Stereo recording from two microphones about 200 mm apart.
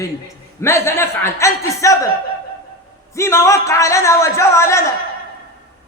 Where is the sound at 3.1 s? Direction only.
15° left (ahead or behind).